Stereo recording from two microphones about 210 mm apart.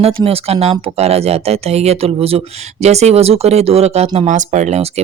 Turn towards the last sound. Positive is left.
turn(degrees=-30)  # may be behind; listen again after turning